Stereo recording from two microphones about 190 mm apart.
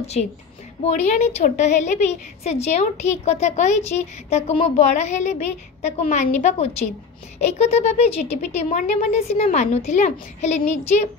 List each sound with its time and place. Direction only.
0.0 s a woman's voice: 35° left (ahead or behind)